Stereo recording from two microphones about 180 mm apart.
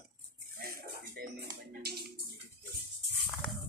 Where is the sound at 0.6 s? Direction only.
60° right (ahead or behind).